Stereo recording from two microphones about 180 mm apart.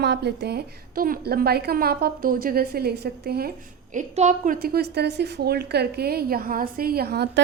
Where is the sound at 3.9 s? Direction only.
40° right (ahead or behind).